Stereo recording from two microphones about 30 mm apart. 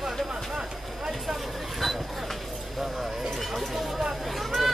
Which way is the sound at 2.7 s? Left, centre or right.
Centre.